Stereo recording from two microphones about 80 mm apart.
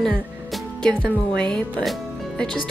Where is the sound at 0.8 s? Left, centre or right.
Centre.